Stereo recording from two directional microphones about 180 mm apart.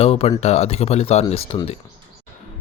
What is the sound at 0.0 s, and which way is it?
A man's voice, 35° left (ahead or behind).